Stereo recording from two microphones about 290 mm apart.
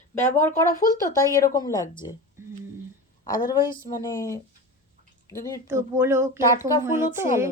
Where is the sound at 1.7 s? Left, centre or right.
Centre.